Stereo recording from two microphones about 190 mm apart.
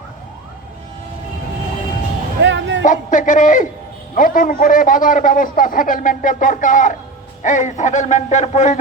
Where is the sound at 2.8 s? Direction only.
40° left (ahead or behind).